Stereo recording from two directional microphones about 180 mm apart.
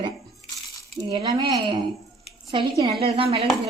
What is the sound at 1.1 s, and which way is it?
Speech, 20° right (ahead or behind).